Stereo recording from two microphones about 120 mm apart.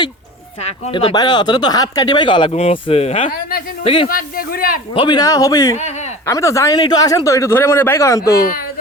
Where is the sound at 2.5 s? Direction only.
65° left (ahead or behind).